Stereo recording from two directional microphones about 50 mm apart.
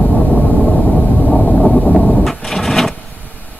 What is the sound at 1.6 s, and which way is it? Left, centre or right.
Vehicle, centre.